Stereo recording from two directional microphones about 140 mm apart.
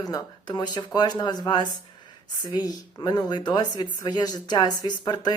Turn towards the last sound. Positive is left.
turn(degrees=30)  # may be behind; listen again after turning